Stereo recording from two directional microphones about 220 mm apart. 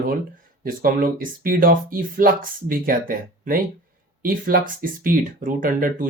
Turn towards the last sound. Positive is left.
turn(degrees=-40)  # may be behind; listen again after turning